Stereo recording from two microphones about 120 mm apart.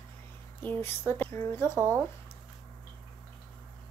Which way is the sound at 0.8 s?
20° left (ahead or behind).